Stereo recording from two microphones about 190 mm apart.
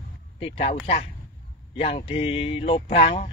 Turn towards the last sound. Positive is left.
turn(degrees=30)  # may be behind; listen again after turning